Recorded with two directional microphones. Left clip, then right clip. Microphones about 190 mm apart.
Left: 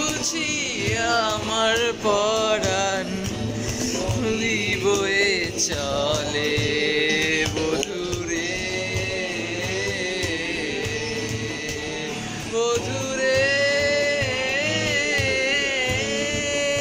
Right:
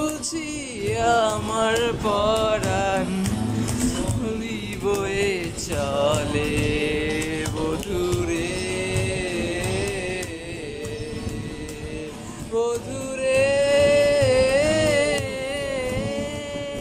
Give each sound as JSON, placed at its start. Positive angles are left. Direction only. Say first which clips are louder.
{"t": 0.9, "sound": "music", "louder": "right 3 dB", "side_deg": -20}
{"t": 1.5, "sound": "music", "louder": "left 1 dB", "side_deg": 0}
{"t": 4.5, "sound": "music", "louder": "left 5 dB", "side_deg": -10}
{"t": 13.2, "sound": "music", "louder": "right 1 dB", "side_deg": -20}